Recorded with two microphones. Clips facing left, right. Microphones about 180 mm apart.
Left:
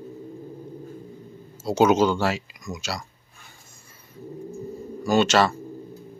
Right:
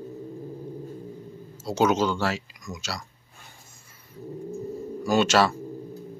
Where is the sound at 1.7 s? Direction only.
15° left (ahead or behind).